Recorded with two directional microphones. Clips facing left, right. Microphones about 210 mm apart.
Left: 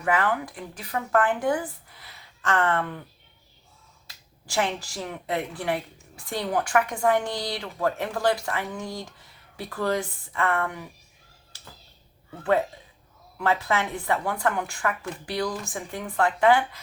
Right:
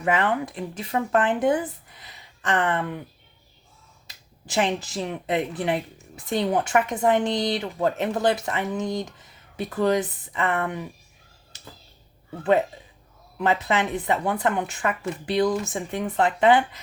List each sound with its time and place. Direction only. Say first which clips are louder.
0.0 s a woman's voice: right 2 dB; 25° right (ahead or behind)
4.0 s a woman's voice: right 5 dB; 20° right (ahead or behind)
11.5 s a sound: right 4 dB; 20° right (ahead or behind)
12.4 s a woman's voice: right 3 dB; 20° right (ahead or behind)